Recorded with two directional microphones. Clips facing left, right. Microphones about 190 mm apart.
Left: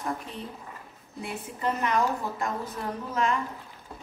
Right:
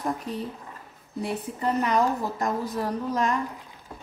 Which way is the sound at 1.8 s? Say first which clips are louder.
Right 2 dB; 35° right (ahead or behind).